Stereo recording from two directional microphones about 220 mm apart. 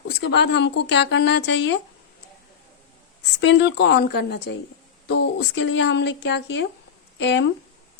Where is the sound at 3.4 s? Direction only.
55° left (ahead or behind).